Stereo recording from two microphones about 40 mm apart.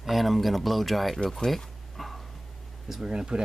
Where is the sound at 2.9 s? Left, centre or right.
Centre.